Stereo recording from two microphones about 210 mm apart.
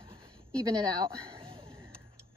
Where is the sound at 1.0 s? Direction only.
20° right (ahead or behind).